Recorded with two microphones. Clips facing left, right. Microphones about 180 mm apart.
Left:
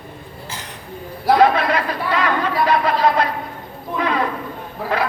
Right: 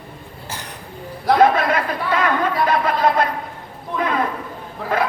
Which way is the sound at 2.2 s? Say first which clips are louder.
Even; 50° right (ahead or behind).